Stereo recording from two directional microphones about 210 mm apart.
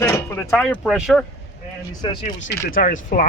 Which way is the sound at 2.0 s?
20° left (ahead or behind).